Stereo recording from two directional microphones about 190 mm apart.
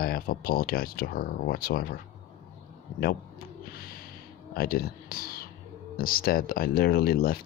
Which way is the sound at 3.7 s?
50° left (ahead or behind).